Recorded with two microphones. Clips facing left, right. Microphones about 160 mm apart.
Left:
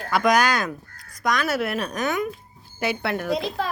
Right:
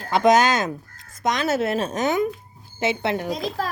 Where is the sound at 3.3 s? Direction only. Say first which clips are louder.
Left 1 dB; 40° right (ahead or behind).